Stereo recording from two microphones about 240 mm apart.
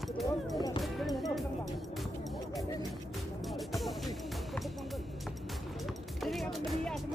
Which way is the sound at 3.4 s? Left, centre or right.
Centre.